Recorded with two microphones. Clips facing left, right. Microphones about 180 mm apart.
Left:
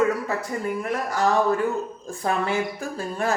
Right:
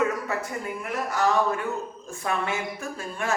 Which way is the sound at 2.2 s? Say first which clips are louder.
Left 4 dB; 35° left (ahead or behind).